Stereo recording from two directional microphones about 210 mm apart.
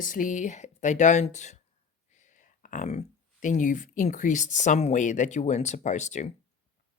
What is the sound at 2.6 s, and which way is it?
Speech, 35° left (ahead or behind).